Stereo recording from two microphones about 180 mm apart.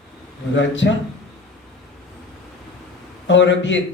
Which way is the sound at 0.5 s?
90° left.